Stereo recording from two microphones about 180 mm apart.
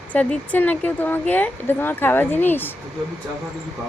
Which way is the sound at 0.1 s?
10° left (ahead or behind).